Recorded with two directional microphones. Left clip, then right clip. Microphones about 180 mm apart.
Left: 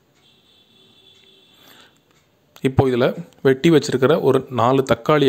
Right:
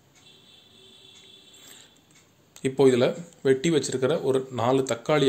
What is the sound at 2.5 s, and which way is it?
Speech, 45° left (ahead or behind).